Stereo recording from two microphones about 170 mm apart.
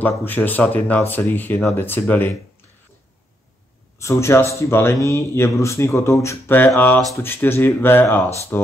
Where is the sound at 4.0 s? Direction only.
15° left (ahead or behind).